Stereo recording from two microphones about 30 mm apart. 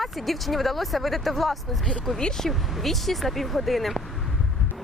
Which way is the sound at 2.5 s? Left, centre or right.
Centre.